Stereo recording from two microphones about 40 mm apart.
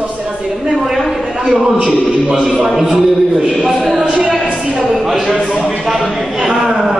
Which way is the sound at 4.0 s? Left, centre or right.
Right.